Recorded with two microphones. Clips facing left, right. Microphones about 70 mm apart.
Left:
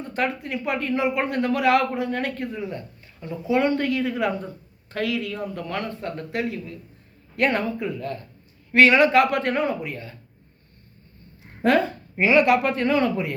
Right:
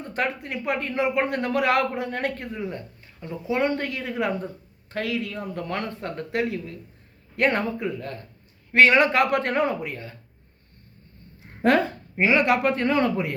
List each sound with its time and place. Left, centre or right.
0.0 s speech: right
7.3 s speech: right
9.9 s speech: right
11.6 s speech: right
12.2 s speech: right
13.0 s speech: right